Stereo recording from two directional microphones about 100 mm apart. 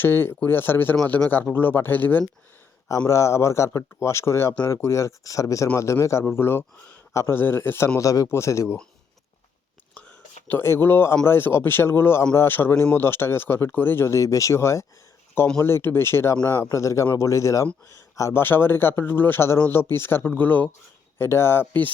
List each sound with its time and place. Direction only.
0.0 s speech: 25° left (ahead or behind)
7.9 s speech: 35° left (ahead or behind)
10.5 s speech: 25° left (ahead or behind)